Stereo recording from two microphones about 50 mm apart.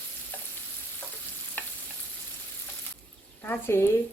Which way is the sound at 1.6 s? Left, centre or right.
Left.